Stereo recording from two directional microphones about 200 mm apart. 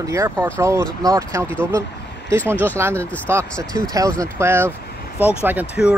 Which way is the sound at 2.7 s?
10° right (ahead or behind).